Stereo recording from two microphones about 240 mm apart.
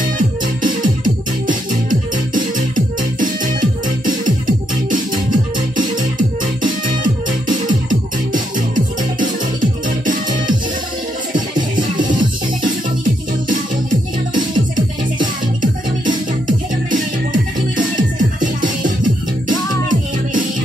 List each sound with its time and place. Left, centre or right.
0.0 s music: right
11.7 s music: right
15.6 s music: right